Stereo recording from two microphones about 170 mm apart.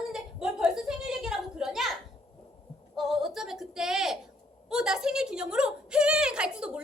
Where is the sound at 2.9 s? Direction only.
Centre (ahead or behind).